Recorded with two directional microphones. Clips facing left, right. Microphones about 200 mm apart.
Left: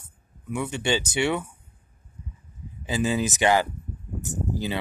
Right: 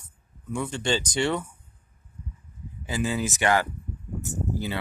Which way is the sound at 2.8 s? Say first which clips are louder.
Left 3 dB; 20° left (ahead or behind).